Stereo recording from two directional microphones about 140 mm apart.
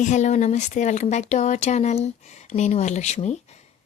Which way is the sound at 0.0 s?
60° left (ahead or behind).